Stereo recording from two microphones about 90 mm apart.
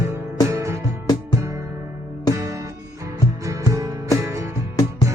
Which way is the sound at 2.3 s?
35° right (ahead or behind).